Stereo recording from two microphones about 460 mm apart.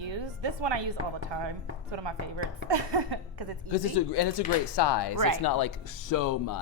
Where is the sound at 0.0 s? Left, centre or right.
Right.